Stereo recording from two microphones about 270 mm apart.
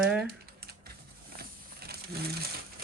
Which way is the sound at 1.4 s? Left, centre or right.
Right.